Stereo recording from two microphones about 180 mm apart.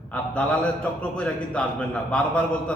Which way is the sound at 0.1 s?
5° left (ahead or behind).